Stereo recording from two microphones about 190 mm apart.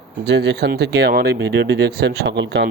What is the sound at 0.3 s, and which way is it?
Speech, 65° right (ahead or behind).